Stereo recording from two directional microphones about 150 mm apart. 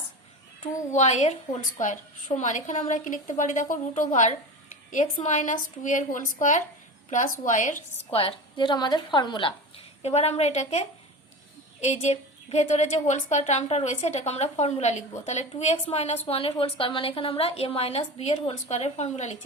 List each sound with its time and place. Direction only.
0.9 s a woman's voice: 50° left (ahead or behind)
8.1 s a woman's voice: 40° left (ahead or behind)
10.0 s a woman's voice: 45° left (ahead or behind)